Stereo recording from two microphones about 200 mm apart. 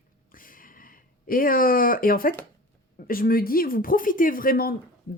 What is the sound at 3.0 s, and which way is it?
Speech, 45° left (ahead or behind).